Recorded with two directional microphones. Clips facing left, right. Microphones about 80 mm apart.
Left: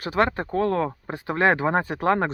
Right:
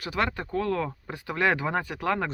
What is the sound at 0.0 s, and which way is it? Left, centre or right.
Speech, left.